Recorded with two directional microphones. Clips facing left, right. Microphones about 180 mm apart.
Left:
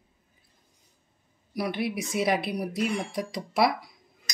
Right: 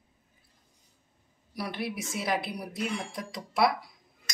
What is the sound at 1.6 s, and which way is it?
Speech, 15° left (ahead or behind).